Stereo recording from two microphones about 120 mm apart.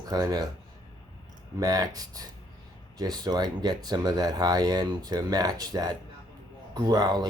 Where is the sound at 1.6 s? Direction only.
30° right (ahead or behind).